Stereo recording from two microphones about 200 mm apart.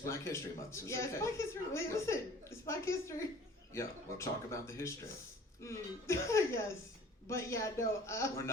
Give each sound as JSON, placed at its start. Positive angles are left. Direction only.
{"t": 0.0, "sound": "speech", "side_deg": 15}